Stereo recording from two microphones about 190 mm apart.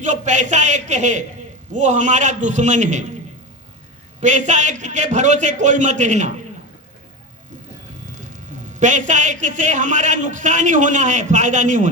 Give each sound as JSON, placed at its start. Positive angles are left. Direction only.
{"t": 0.0, "sound": "a man's voice", "side_deg": -40}
{"t": 4.2, "sound": "a man's voice", "side_deg": -40}
{"t": 8.1, "sound": "a man's voice", "side_deg": -40}